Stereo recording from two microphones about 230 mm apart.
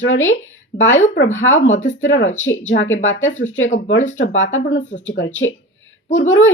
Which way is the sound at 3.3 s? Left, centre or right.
Left.